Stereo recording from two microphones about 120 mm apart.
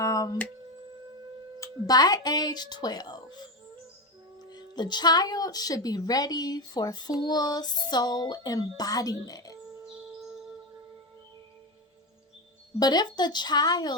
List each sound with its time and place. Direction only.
0.0 s a sound: 25° left (ahead or behind)
1.5 s speech: 30° left (ahead or behind)
12.8 s speech: 35° left (ahead or behind)